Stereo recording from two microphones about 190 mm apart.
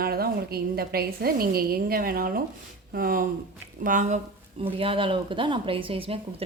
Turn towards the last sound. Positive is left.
turn(degrees=-30)  # may be behind; listen again after turning